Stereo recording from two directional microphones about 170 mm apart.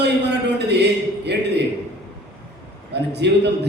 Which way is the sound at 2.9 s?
80° right.